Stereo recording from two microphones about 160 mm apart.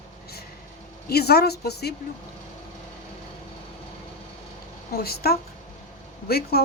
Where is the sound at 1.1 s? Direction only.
85° left.